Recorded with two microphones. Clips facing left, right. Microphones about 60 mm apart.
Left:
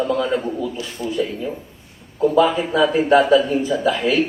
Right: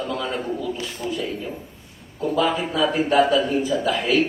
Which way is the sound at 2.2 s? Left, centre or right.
Left.